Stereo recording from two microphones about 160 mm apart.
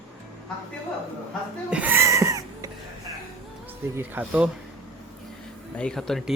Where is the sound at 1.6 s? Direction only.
10° right (ahead or behind).